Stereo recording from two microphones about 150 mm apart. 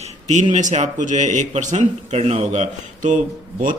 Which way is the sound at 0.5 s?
50° right (ahead or behind).